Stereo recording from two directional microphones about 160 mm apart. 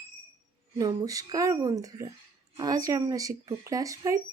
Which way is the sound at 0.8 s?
20° right (ahead or behind).